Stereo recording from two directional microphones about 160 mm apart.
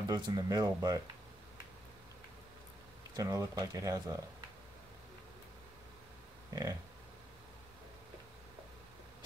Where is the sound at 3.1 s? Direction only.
20° right (ahead or behind).